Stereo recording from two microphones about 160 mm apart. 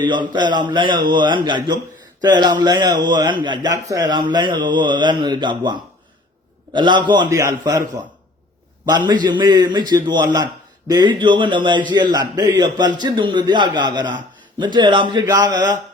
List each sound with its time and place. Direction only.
0.0 s a man's voice: 30° right (ahead or behind)